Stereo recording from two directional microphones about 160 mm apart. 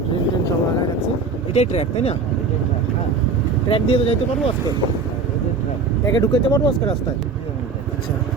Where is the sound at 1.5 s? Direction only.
40° left (ahead or behind).